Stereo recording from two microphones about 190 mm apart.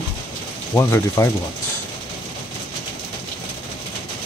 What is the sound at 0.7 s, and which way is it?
Speech, 15° left (ahead or behind).